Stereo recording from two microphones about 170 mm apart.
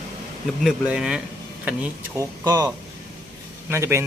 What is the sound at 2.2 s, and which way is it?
Speech, 20° right (ahead or behind).